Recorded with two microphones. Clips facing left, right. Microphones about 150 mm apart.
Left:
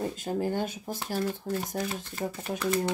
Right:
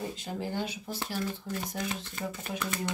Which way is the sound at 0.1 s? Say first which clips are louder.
Left 6 dB; 50° left (ahead or behind).